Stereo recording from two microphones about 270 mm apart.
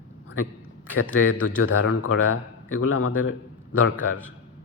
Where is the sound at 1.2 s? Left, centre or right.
Left.